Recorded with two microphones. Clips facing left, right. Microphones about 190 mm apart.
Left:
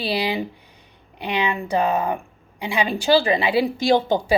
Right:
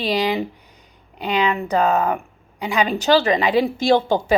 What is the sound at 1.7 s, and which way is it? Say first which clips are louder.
A woman's voice: right 1 dB; 10° left (ahead or behind).